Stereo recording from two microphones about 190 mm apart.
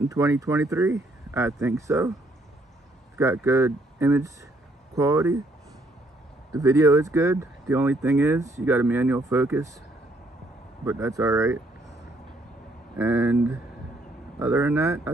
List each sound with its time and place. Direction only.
0.1 s speech: 15° right (ahead or behind)
3.2 s speech: 15° right (ahead or behind)
6.5 s speech: 15° right (ahead or behind)
10.9 s speech: 15° right (ahead or behind)
12.9 s speech: 10° right (ahead or behind)